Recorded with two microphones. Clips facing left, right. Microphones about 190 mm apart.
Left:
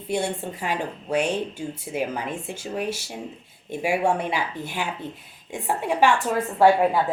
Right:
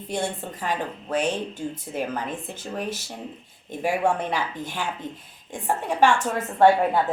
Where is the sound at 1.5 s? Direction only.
10° left (ahead or behind).